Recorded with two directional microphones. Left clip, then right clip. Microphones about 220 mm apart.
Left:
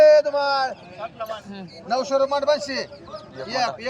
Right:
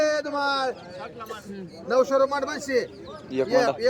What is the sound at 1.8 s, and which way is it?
Speech, 15° right (ahead or behind).